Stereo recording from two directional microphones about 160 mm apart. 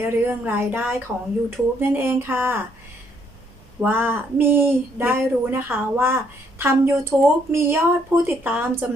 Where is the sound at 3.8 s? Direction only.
10° right (ahead or behind).